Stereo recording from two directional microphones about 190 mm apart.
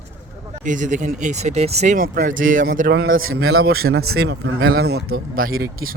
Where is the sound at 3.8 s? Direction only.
90° right.